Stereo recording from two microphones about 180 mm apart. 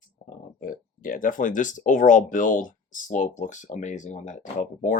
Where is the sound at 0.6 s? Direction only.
50° left (ahead or behind).